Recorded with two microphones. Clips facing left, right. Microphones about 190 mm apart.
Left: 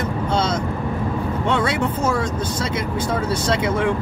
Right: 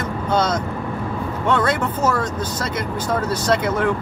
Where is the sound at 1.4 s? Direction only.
50° right (ahead or behind).